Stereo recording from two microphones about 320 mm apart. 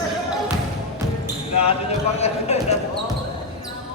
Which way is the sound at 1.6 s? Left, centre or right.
Centre.